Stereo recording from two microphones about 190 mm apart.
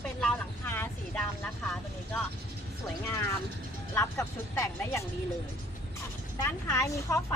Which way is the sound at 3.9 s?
15° left (ahead or behind).